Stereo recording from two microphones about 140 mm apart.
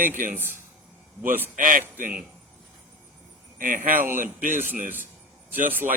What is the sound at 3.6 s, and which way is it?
Speech, 75° right (ahead or behind).